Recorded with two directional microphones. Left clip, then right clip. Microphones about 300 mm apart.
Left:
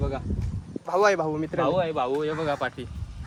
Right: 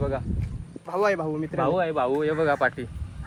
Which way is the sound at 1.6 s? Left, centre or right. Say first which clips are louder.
Right 1 dB; centre.